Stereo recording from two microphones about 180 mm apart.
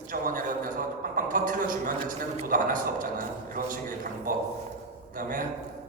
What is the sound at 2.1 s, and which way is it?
A man's voice, 50° right (ahead or behind).